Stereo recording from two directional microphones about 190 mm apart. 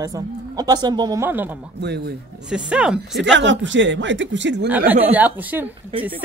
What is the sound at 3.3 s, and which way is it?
Speech, 75° right (ahead or behind).